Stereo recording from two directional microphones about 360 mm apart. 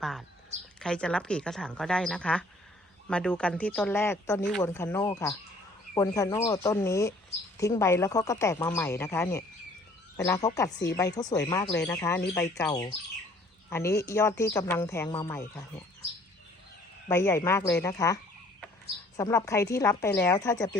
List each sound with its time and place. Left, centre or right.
0.0 s a sound: centre
0.8 s speech: centre
17.1 s speech: centre